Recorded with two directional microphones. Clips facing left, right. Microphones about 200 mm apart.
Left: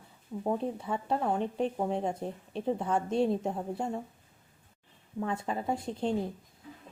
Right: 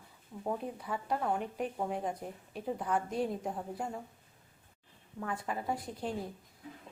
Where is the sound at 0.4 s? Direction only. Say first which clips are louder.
Left 5 dB; 25° left (ahead or behind).